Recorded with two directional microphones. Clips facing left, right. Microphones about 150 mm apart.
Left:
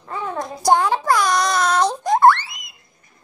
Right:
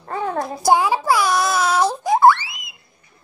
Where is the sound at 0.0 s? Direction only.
45° right (ahead or behind).